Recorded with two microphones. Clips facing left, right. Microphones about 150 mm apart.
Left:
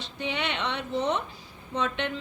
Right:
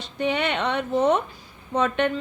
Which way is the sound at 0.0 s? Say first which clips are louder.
Right 7 dB; 50° right (ahead or behind).